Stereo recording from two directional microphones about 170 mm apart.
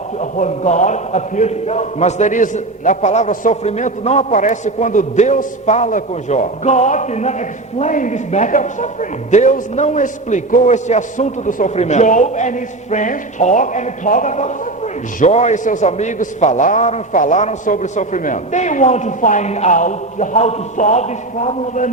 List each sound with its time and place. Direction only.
0.2 s a man's voice: 45° left (ahead or behind)